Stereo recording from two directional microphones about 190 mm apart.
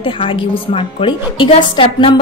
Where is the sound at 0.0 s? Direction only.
25° left (ahead or behind).